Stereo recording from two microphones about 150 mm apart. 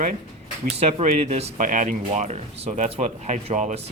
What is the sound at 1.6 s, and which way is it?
Speech, 55° right (ahead or behind).